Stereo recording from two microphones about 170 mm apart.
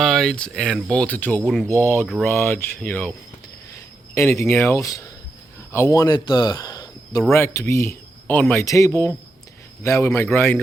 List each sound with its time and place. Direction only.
0.0 s speech: centre (ahead or behind)
2.0 s speech: centre (ahead or behind)
2.3 s speech: 10° left (ahead or behind)